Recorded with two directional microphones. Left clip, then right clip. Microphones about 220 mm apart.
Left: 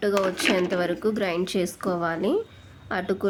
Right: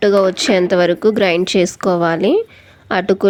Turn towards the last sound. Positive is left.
turn(degrees=-30)  # may be behind; listen again after turning